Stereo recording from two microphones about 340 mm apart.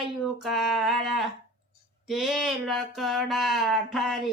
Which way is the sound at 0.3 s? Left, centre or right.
Centre.